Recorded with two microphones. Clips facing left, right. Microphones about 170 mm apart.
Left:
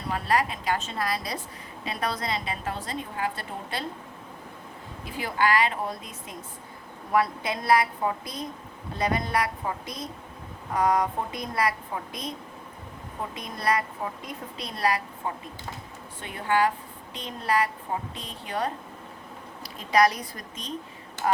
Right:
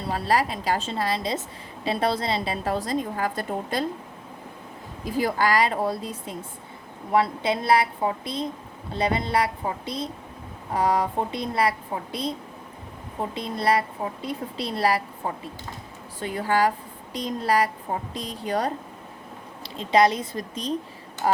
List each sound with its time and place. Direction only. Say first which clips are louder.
0.0 s a woman's voice: right 2 dB; 35° right (ahead or behind)
5.0 s a woman's voice: right 3 dB; 40° right (ahead or behind)
13.3 s a woman's voice: right 4 dB; 30° right (ahead or behind)
16.2 s a woman's voice: right 2 dB; 35° right (ahead or behind)
19.6 s a woman's voice: right 2 dB; 25° right (ahead or behind)